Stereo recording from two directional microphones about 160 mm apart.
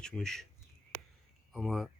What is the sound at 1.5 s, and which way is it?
Speech, centre (ahead or behind).